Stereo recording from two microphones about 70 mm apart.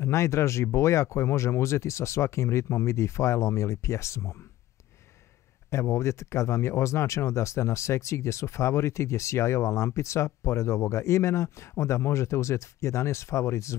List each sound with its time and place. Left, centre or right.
0.0 s speech: left
5.7 s speech: left